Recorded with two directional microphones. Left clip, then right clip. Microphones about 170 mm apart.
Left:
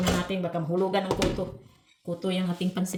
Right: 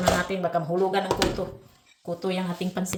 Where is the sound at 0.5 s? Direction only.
20° left (ahead or behind).